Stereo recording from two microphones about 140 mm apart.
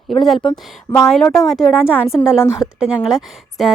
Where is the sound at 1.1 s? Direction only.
5° left (ahead or behind).